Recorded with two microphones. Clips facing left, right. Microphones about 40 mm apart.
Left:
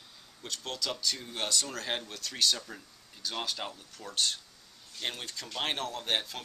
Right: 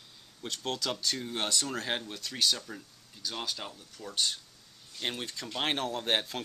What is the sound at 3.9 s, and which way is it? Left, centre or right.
Speech, centre.